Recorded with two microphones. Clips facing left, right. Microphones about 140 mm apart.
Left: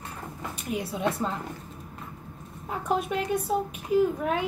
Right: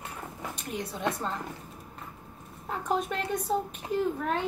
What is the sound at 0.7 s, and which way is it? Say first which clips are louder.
Speech: left 4 dB; 10° left (ahead or behind).